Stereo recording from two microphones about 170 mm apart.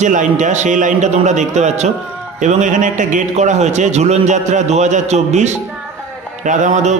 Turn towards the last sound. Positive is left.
turn(degrees=-45)  # may be behind; listen again after turning